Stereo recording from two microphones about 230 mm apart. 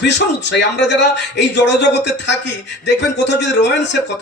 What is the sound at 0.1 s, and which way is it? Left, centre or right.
A man's voice, left.